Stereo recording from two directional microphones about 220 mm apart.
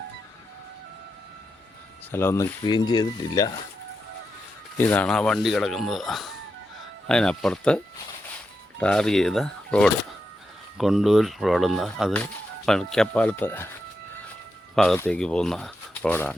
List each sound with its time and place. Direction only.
2.1 s speech: 10° left (ahead or behind)
4.8 s speech: 5° left (ahead or behind)
8.8 s speech: 5° left (ahead or behind)
14.8 s speech: 5° left (ahead or behind)